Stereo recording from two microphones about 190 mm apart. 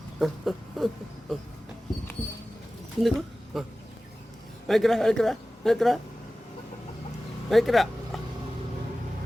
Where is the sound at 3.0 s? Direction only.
Centre (ahead or behind).